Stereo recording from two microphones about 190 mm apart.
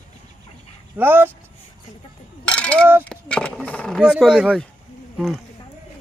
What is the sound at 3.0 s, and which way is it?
Speech, 5° left (ahead or behind).